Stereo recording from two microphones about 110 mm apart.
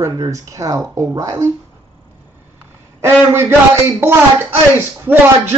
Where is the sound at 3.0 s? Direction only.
20° right (ahead or behind).